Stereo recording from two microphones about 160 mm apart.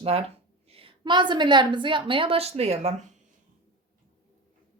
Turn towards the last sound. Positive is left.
turn(degrees=-45)  # may be behind; listen again after turning